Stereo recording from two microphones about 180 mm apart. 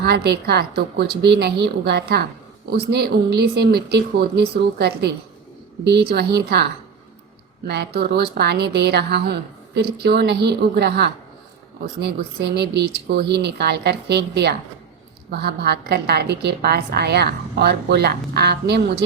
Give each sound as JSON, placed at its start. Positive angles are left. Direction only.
{"t": 0.0, "sound": "a woman's voice", "side_deg": -65}
{"t": 7.7, "sound": "a woman's voice", "side_deg": -65}